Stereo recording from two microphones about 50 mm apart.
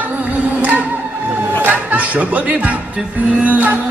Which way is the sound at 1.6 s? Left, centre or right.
Right.